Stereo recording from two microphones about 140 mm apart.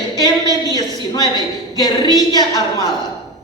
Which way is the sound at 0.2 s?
30° left (ahead or behind).